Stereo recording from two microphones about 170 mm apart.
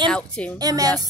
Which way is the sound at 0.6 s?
20° right (ahead or behind).